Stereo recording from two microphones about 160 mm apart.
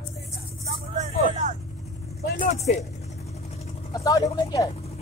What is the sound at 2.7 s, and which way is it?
Speech, 45° left (ahead or behind).